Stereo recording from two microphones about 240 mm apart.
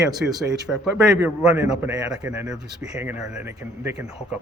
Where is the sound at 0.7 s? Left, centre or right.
Centre.